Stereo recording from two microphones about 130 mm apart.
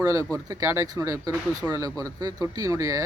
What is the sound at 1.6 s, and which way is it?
Speech, 15° right (ahead or behind).